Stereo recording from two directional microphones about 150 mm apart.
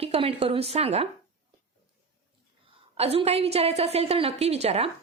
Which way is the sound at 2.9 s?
40° right (ahead or behind).